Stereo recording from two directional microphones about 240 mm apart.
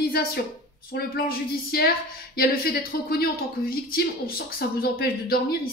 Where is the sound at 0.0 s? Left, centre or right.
Left.